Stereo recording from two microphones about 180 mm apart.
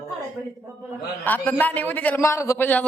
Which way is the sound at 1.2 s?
10° left (ahead or behind).